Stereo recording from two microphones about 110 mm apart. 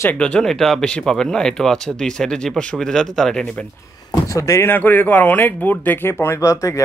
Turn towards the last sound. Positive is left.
turn(degrees=30)  # may be behind; listen again after turning